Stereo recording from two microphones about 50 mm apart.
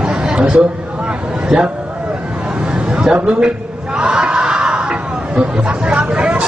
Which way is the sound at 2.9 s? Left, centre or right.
Centre.